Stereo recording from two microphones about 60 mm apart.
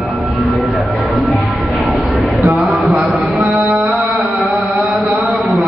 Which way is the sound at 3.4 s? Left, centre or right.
Right.